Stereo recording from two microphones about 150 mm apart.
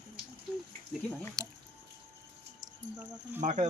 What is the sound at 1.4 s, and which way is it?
Speech, 25° right (ahead or behind).